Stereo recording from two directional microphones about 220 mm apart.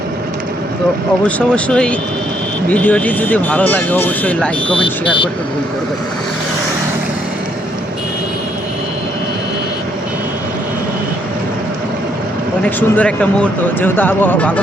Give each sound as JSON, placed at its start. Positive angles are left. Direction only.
{"t": 1.4, "sound": "speech", "side_deg": 5}
{"t": 4.7, "sound": "speech", "side_deg": 20}
{"t": 12.6, "sound": "speech", "side_deg": 5}